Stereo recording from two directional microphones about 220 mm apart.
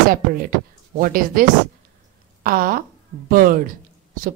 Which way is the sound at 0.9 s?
40° right (ahead or behind).